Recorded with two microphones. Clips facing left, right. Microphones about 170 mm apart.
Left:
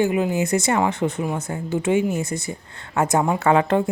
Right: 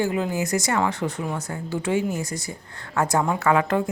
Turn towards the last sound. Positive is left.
turn(degrees=25)  # may be behind; listen again after turning